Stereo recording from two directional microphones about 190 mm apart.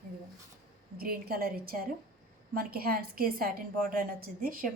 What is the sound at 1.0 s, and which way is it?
Speech, 50° right (ahead or behind).